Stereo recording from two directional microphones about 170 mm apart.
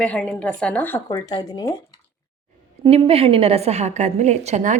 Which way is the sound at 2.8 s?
30° right (ahead or behind).